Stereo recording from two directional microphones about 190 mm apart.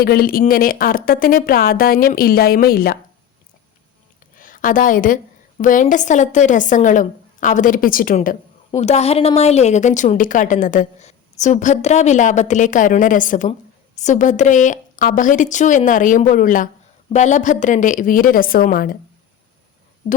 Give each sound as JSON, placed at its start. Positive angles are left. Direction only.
{"t": 0.0, "sound": "a woman's voice", "side_deg": 50}
{"t": 4.4, "sound": "a woman's voice", "side_deg": 45}